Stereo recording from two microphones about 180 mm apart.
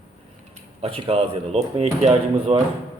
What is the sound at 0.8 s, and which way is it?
Speech, 30° right (ahead or behind).